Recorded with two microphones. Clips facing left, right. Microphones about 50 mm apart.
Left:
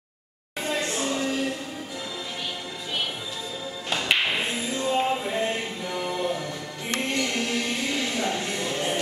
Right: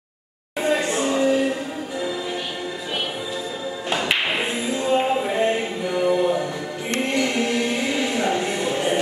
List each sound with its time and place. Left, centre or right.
0.6 s music: centre
3.9 s tap: right
4.8 s music: centre
5.9 s a capella: centre
7.2 s music: right